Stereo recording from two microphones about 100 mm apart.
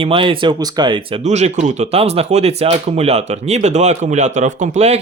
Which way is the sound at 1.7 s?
90° right.